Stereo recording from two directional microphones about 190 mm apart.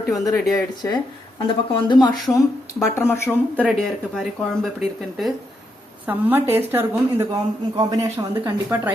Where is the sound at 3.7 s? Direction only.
Centre (ahead or behind).